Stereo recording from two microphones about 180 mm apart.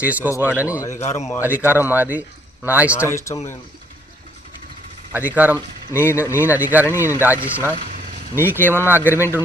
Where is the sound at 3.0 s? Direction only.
15° left (ahead or behind).